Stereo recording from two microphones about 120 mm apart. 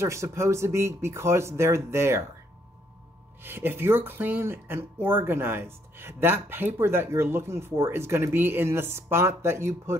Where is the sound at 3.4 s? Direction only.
20° right (ahead or behind).